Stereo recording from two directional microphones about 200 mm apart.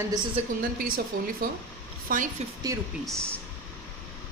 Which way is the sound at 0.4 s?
30° right (ahead or behind).